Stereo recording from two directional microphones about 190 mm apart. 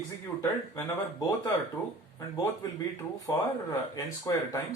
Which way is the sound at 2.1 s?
15° left (ahead or behind).